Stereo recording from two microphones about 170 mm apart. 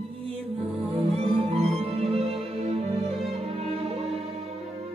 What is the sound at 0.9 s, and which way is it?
Music, 35° right (ahead or behind).